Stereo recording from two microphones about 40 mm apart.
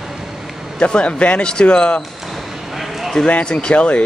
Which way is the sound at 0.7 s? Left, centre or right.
Left.